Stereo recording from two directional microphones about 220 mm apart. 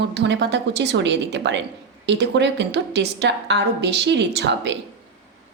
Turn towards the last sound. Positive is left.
turn(degrees=-50)  # may be behind; listen again after turning